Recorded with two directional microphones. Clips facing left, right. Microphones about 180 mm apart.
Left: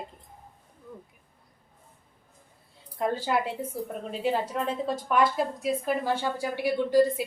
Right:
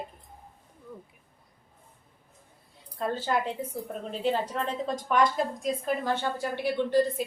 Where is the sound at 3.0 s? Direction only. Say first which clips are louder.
Left 2 dB; 10° left (ahead or behind).